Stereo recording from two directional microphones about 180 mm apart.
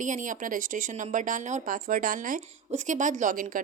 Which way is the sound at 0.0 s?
45° right (ahead or behind).